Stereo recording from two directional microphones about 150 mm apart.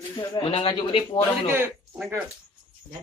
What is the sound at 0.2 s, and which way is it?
A man's voice, 30° left (ahead or behind).